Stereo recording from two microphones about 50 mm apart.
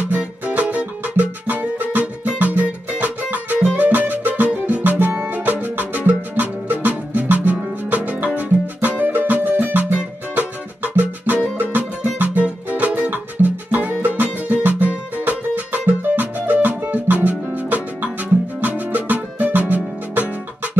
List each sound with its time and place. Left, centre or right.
0.2 s music: right
4.9 s music: right
9.9 s music: right